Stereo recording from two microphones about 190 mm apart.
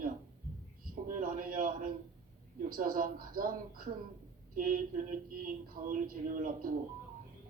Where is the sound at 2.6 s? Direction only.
45° right (ahead or behind).